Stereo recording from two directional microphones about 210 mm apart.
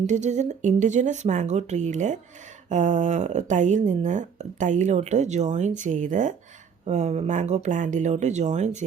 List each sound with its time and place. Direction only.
0.1 s speech: 35° right (ahead or behind)